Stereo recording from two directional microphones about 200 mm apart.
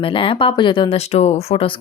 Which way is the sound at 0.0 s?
25° left (ahead or behind).